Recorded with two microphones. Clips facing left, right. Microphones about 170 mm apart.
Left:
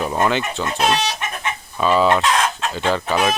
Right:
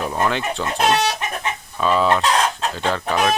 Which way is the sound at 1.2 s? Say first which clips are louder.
Right 1 dB; 35° right (ahead or behind).